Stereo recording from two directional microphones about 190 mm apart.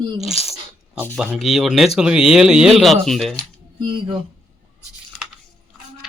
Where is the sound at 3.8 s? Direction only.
25° right (ahead or behind).